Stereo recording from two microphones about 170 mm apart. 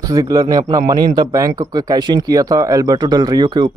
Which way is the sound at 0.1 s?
20° right (ahead or behind).